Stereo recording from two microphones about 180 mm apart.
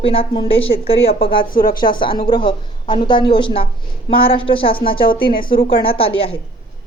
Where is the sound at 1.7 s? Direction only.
25° left (ahead or behind).